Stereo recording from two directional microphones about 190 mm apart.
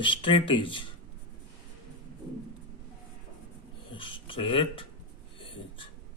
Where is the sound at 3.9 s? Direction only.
25° left (ahead or behind).